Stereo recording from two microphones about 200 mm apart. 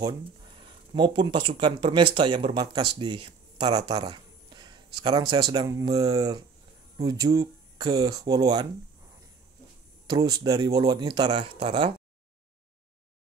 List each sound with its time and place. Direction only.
0.6 s speech: 25° right (ahead or behind)
10.0 s speech: 20° right (ahead or behind)